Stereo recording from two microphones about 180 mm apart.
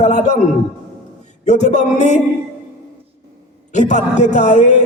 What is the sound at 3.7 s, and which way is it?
Speech, 40° left (ahead or behind).